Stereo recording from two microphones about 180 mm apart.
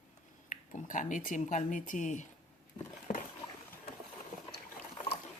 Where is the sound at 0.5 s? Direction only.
45° left (ahead or behind).